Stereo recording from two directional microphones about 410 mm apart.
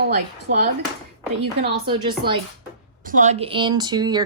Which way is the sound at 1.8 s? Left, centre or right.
Centre.